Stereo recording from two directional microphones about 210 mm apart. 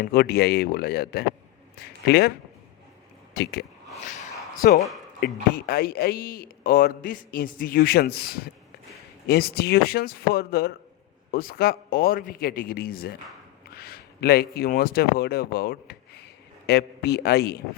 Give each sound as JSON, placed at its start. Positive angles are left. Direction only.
{"t": 0.0, "sound": "a man's voice", "side_deg": 50}
{"t": 3.3, "sound": "speech", "side_deg": 50}
{"t": 4.1, "sound": "a sound", "side_deg": 40}
{"t": 5.2, "sound": "a man's voice", "side_deg": 45}